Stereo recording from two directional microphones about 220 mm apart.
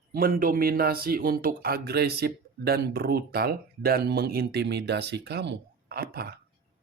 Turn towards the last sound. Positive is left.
turn(degrees=-45)  # may be behind; listen again after turning